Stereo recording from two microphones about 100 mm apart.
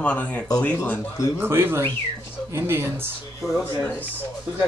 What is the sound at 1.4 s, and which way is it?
Speech, 20° right (ahead or behind).